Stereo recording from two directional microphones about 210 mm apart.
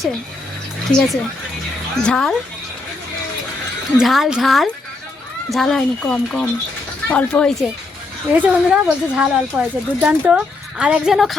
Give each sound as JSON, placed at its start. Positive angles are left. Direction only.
{"t": 0.9, "sound": "speech", "side_deg": 0}
{"t": 3.9, "sound": "speech", "side_deg": 0}
{"t": 8.3, "sound": "speech", "side_deg": -5}